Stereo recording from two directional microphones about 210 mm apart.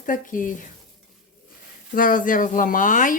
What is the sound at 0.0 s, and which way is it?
Speech, 40° left (ahead or behind).